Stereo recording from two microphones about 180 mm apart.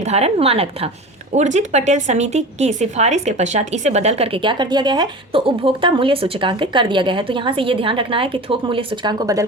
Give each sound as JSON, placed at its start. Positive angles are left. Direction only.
{"t": 0.0, "sound": "a woman's voice", "side_deg": -35}